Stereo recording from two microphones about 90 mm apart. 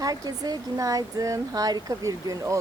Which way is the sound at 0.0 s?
45° right (ahead or behind).